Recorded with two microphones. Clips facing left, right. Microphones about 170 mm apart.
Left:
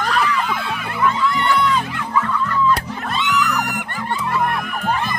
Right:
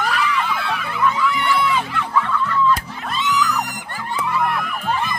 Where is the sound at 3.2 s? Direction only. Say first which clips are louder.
Even; 65° left (ahead or behind).